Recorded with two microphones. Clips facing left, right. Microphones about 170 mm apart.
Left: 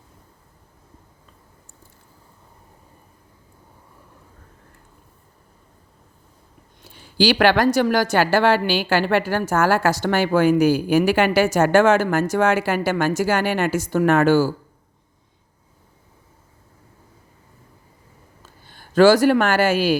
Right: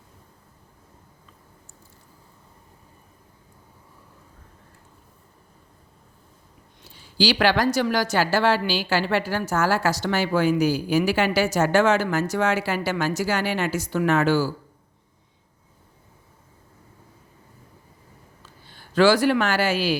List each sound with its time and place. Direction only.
6.8 s speech: 55° left (ahead or behind)
18.4 s speech: 50° left (ahead or behind)